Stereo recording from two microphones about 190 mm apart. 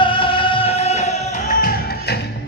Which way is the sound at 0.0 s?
25° left (ahead or behind).